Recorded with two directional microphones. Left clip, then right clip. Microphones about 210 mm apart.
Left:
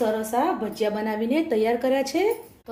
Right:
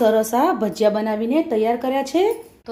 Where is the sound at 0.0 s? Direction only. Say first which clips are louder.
Right 7 dB; 50° right (ahead or behind).